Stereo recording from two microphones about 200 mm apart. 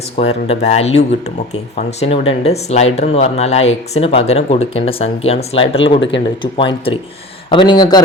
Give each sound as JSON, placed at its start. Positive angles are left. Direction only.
{"t": 0.2, "sound": "speech", "side_deg": 30}